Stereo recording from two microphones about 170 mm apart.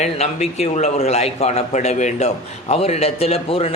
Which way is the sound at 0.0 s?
40° left (ahead or behind).